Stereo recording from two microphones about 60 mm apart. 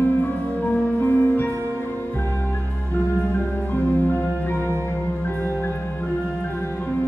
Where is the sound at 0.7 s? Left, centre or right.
Left.